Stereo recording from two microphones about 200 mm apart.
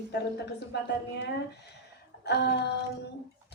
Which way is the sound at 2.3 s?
55° left (ahead or behind).